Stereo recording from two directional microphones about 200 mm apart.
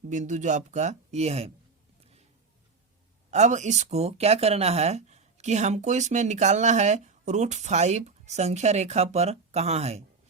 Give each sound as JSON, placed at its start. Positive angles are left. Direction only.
{"t": 0.1, "sound": "speech", "side_deg": -40}
{"t": 3.2, "sound": "speech", "side_deg": -35}